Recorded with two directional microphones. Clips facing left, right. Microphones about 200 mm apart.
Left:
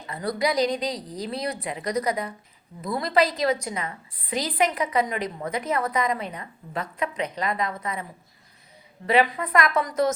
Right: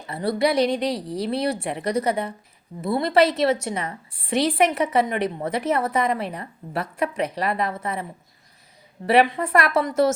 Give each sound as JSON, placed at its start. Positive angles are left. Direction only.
{"t": 0.1, "sound": "a woman's voice", "side_deg": -30}
{"t": 9.0, "sound": "a woman's voice", "side_deg": -45}
{"t": 9.3, "sound": "a woman's voice", "side_deg": -30}